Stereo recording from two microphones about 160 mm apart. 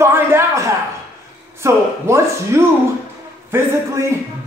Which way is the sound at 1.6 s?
15° right (ahead or behind).